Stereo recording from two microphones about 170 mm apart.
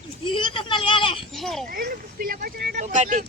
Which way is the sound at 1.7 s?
60° right (ahead or behind).